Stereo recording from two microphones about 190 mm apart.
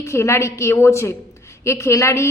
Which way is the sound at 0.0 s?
15° left (ahead or behind).